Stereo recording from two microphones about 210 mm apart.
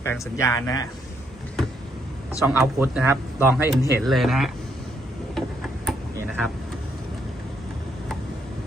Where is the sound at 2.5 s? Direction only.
10° right (ahead or behind).